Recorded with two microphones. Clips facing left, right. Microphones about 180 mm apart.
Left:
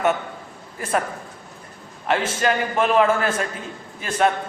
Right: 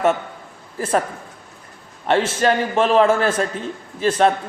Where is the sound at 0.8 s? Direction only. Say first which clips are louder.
Right 3 dB; 30° right (ahead or behind).